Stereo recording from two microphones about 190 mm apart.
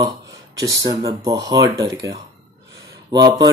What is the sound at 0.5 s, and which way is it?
Speech, 20° right (ahead or behind).